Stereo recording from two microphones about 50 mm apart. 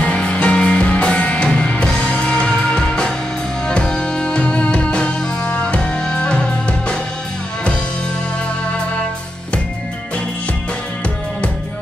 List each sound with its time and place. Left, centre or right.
0.0 s music: left